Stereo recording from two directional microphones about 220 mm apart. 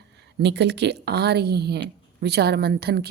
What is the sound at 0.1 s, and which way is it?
A woman's voice, 50° right (ahead or behind).